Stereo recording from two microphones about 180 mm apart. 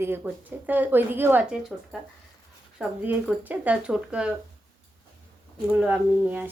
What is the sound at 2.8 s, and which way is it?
Speech, 10° right (ahead or behind).